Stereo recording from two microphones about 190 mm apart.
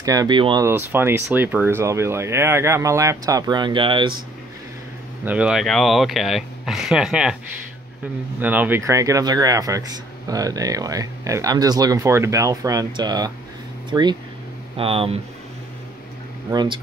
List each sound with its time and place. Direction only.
0.0 s speech: 20° right (ahead or behind)
0.7 s speech: 10° right (ahead or behind)
5.2 s speech: 5° right (ahead or behind)
8.4 s speech: 10° right (ahead or behind); by 15.1 s 30° right (ahead or behind)
16.4 s speech: 25° right (ahead or behind)